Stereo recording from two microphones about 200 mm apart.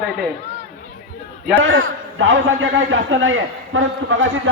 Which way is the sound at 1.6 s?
75° right (ahead or behind).